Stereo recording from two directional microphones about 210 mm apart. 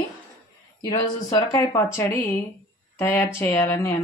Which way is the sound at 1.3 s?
15° left (ahead or behind).